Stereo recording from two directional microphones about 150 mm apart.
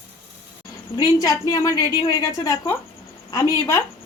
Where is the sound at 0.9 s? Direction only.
25° left (ahead or behind).